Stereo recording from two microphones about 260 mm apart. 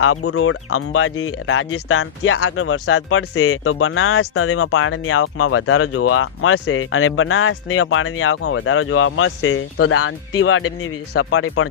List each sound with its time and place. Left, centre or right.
0.0 s speech: left